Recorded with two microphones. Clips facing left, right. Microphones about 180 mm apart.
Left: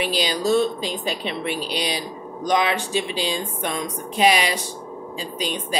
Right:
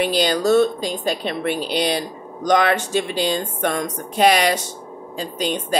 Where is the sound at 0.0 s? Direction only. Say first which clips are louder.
Right 4 dB; 50° right (ahead or behind).